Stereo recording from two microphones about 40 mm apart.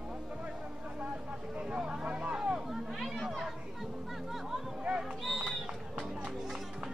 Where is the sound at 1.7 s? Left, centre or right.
Right.